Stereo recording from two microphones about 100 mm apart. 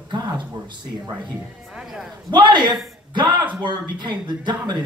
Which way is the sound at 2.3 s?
50° right (ahead or behind).